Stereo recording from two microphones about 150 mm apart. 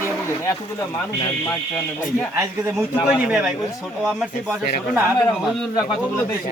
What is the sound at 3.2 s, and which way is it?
Speech, 5° right (ahead or behind).